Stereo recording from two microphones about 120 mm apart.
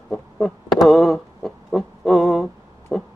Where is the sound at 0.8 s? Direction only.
Centre (ahead or behind).